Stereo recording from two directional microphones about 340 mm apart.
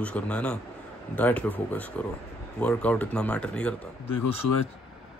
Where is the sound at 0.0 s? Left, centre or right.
Centre.